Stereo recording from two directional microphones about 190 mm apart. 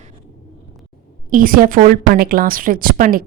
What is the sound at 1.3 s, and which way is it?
Speech, 45° right (ahead or behind).